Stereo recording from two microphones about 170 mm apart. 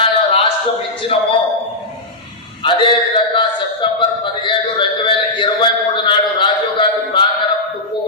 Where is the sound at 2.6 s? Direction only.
30° left (ahead or behind).